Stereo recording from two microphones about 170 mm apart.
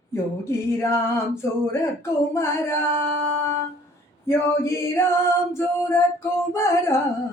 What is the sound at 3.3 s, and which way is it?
Music, 15° left (ahead or behind).